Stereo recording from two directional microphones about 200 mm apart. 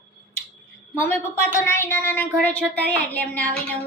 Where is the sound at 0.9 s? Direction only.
10° left (ahead or behind).